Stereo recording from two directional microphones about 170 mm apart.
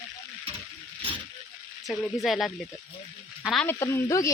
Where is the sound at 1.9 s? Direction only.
Centre (ahead or behind).